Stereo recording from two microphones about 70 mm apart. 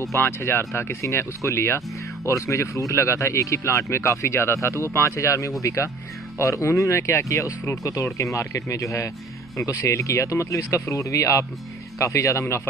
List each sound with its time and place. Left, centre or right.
0.1 s speech: left